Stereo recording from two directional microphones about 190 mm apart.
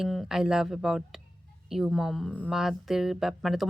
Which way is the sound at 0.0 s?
Centre (ahead or behind).